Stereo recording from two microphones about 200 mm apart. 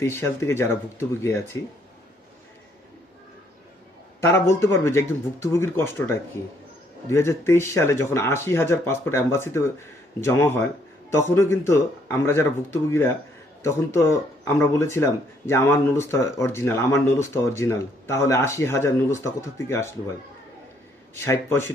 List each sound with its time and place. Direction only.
0.0 s speech: 10° left (ahead or behind)
4.2 s speech: 10° left (ahead or behind)
21.2 s speech: 15° left (ahead or behind)